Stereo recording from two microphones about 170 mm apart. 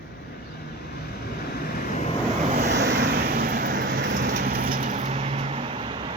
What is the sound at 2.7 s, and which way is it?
Vehicle, 80° right.